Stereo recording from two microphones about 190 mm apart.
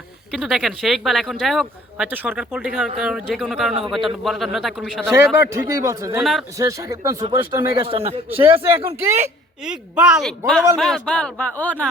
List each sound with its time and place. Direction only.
0.3 s speech: centre (ahead or behind)
5.1 s a man's voice: 15° right (ahead or behind); by 8.2 s 30° right (ahead or behind)
8.4 s a man's voice: 10° right (ahead or behind); by 11.9 s 10° left (ahead or behind)